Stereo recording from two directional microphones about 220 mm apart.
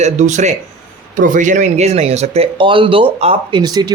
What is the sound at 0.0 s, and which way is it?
Speech, 35° right (ahead or behind).